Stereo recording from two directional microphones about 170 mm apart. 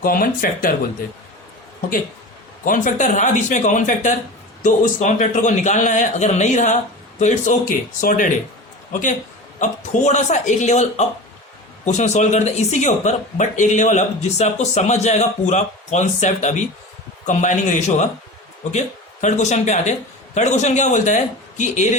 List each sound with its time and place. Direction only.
0.0 s speech: 55° left (ahead or behind)
2.6 s speech: 50° left (ahead or behind)